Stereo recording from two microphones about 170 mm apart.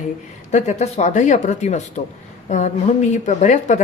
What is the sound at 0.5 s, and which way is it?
Speech, 45° left (ahead or behind).